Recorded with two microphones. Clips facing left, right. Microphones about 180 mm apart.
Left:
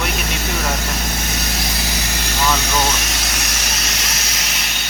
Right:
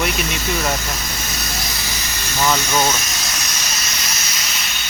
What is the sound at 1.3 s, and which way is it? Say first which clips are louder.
Vehicle: left 3 dB; 60° left (ahead or behind).